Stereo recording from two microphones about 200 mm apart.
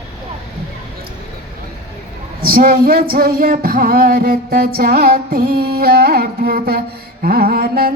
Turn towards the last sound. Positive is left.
turn(degrees=-50)  # may be behind; listen again after turning